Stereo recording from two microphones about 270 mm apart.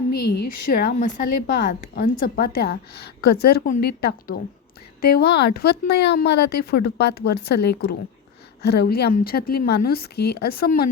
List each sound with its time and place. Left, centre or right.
0.4 s a woman's voice: left
0.7 s a woman's voice: left